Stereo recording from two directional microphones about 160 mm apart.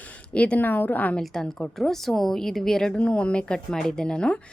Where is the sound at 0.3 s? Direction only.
10° left (ahead or behind).